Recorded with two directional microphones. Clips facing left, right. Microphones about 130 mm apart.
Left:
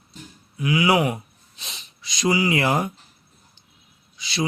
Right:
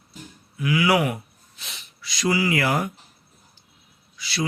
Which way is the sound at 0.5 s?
20° left (ahead or behind).